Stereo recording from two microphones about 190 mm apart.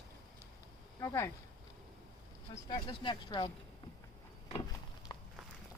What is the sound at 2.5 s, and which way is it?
Speech, 25° left (ahead or behind).